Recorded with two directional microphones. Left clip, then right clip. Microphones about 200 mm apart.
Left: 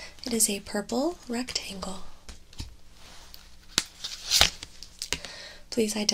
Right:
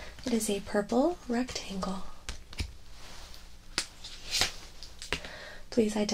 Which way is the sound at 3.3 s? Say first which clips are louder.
Left 2 dB; 15° left (ahead or behind).